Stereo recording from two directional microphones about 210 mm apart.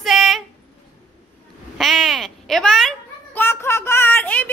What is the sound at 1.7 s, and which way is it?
A child's voice, centre (ahead or behind).